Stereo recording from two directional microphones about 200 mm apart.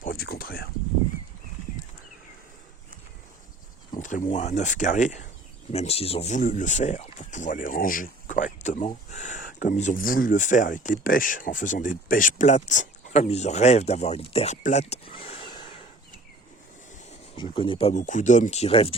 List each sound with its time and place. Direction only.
0.0 s speech: 50° left (ahead or behind)
3.9 s speech: 40° left (ahead or behind)
17.1 s speech: 25° left (ahead or behind)